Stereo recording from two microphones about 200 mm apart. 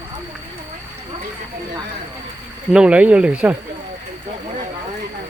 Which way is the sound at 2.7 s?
5° right (ahead or behind).